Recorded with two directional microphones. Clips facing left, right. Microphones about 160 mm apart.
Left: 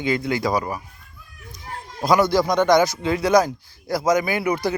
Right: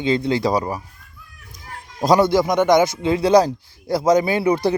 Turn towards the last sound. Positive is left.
turn(degrees=-30)  # may be behind; listen again after turning